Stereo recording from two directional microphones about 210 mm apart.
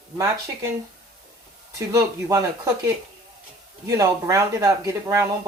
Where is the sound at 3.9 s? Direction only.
15° right (ahead or behind).